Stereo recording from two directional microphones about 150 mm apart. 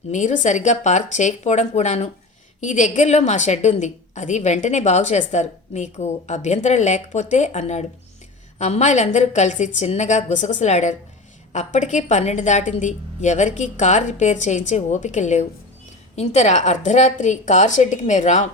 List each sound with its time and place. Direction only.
0.1 s a woman's voice: 55° left (ahead or behind)